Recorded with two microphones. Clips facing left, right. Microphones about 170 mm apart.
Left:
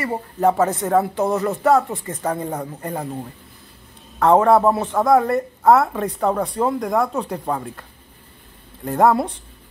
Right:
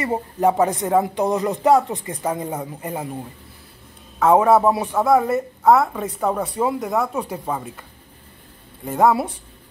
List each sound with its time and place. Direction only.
0.0 s speech: 15° right (ahead or behind)
4.2 s a man's voice: 5° right (ahead or behind)
8.8 s a man's voice: centre (ahead or behind)